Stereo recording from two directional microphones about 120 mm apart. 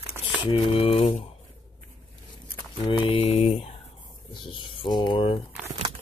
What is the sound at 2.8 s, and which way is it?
Mantra, 45° left (ahead or behind).